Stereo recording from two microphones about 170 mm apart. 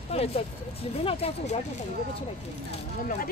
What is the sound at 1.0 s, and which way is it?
Speech, 35° left (ahead or behind).